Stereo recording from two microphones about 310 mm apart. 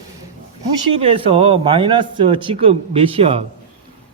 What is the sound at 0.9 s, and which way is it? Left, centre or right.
Speech, centre.